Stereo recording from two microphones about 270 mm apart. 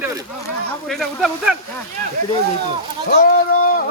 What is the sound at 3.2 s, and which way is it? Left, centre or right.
Speech, left.